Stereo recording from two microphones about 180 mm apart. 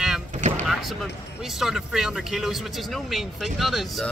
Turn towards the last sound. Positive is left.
turn(degrees=0)  # may be behind; listen again after turning